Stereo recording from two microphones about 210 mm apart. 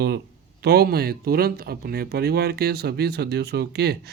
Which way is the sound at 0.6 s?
50° right (ahead or behind).